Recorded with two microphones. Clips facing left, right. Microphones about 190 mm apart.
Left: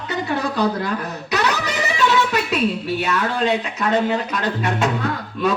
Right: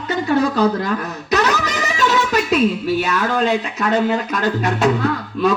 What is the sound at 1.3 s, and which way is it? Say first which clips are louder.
Music: right 4 dB; 40° right (ahead or behind).